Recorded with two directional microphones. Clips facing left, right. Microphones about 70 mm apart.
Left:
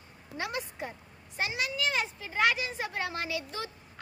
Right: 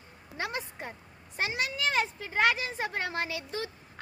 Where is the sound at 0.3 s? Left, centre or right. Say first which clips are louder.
Even; right.